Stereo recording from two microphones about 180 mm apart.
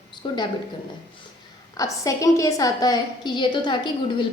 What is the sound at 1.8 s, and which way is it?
A woman's voice, 20° left (ahead or behind).